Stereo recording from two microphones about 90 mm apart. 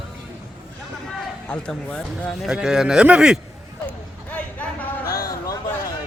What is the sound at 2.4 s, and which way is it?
Speech, 10° right (ahead or behind).